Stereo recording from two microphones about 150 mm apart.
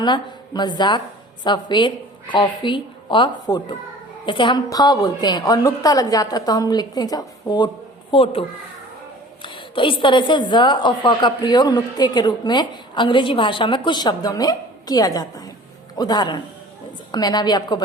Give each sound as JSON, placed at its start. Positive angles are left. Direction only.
{"t": 0.0, "sound": "a woman's voice", "side_deg": 30}